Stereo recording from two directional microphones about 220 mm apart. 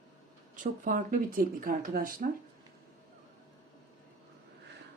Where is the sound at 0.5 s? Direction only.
40° right (ahead or behind).